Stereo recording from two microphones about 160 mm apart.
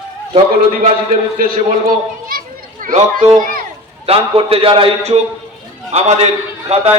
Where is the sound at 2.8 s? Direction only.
60° right (ahead or behind).